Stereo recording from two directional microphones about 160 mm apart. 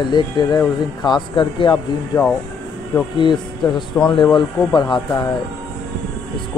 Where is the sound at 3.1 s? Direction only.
30° left (ahead or behind).